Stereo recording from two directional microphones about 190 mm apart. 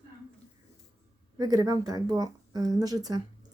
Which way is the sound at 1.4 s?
20° right (ahead or behind).